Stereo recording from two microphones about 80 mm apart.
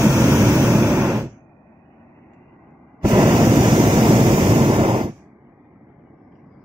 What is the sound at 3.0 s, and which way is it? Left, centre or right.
Waves, right.